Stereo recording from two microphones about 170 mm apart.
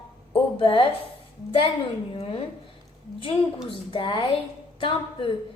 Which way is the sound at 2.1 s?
35° left (ahead or behind).